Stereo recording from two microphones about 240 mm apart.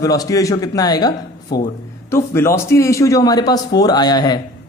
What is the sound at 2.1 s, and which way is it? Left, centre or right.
A man's voice, centre.